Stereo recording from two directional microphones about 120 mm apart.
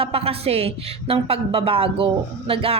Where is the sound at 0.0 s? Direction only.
50° right (ahead or behind).